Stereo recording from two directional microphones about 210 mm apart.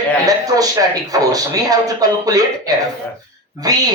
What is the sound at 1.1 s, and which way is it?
Speech, 15° right (ahead or behind).